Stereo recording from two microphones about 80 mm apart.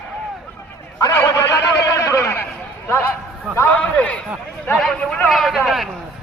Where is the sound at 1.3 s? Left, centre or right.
Left.